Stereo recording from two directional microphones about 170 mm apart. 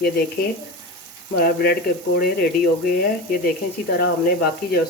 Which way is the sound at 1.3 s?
65° left (ahead or behind).